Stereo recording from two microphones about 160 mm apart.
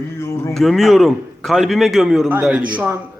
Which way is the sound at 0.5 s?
Centre (ahead or behind).